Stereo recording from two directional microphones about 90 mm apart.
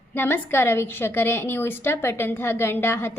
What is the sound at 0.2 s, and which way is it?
A woman's voice, 25° left (ahead or behind).